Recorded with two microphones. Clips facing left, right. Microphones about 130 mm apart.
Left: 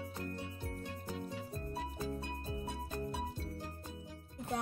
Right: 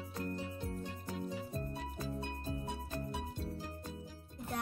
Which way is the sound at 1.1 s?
5° right (ahead or behind).